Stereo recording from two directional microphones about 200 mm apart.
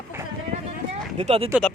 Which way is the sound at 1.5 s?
5° left (ahead or behind).